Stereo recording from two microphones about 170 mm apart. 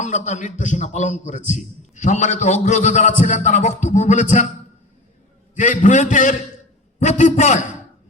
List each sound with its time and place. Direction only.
0.0 s a man's voice: 45° left (ahead or behind)
5.5 s a man's voice: 45° left (ahead or behind)